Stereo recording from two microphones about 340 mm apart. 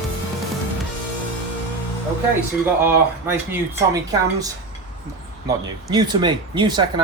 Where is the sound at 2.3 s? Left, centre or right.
Centre.